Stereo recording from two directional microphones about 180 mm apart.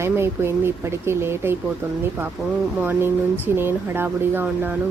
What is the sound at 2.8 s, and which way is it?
A woman's voice, 10° right (ahead or behind).